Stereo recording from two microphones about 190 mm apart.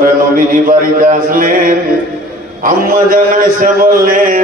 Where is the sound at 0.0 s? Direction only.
45° right (ahead or behind).